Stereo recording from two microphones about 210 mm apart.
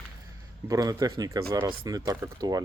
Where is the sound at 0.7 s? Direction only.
15° right (ahead or behind).